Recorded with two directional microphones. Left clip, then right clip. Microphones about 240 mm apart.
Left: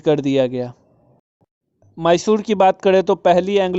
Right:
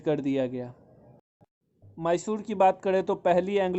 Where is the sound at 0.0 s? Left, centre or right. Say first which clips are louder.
Left 11 dB; left.